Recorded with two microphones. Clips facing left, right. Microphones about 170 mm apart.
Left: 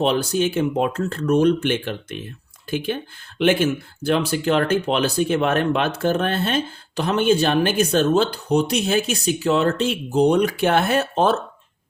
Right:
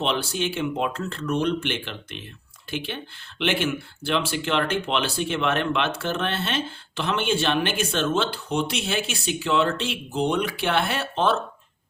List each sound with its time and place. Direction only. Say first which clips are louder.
0.0 s speech: left 6 dB; 40° left (ahead or behind)